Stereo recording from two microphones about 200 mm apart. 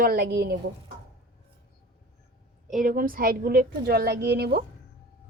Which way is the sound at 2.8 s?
45° right (ahead or behind).